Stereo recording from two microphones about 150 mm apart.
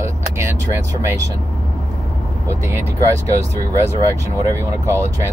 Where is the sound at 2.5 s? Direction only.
20° right (ahead or behind).